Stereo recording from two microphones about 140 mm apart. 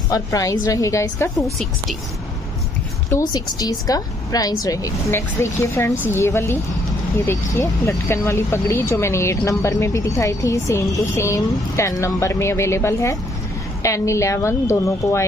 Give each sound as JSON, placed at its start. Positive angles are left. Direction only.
{"t": 0.1, "sound": "speech", "side_deg": 25}
{"t": 3.1, "sound": "speech", "side_deg": 25}